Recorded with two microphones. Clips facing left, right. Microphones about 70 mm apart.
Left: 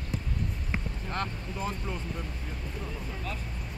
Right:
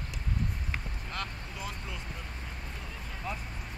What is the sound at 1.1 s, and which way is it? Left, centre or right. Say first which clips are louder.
Vehicle: left 5 dB; left.